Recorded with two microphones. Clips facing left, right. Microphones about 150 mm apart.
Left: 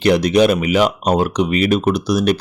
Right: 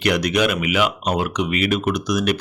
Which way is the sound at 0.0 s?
30° left (ahead or behind).